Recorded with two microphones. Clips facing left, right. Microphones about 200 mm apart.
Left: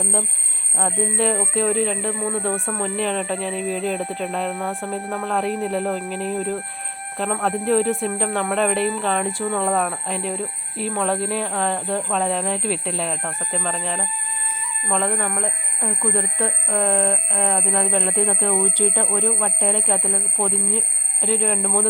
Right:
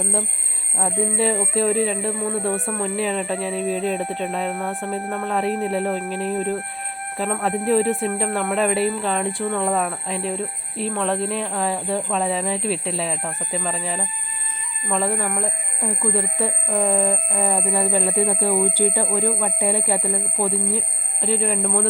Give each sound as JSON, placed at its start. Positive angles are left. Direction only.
{"t": 0.0, "sound": "speech", "side_deg": 0}